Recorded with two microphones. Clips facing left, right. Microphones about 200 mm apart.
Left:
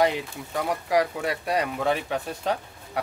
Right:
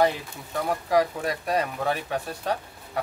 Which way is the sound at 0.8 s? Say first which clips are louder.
Right 1 dB; 10° left (ahead or behind).